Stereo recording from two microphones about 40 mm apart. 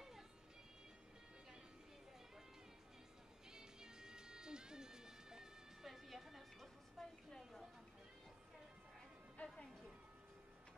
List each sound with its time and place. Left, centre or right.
3.4 s music: centre
5.9 s music: centre
7.0 s a sound: centre
9.4 s music: left